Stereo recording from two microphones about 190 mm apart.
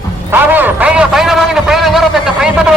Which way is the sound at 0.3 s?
10° right (ahead or behind).